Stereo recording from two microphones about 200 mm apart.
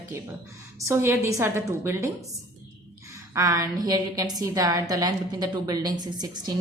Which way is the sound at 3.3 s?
15° right (ahead or behind).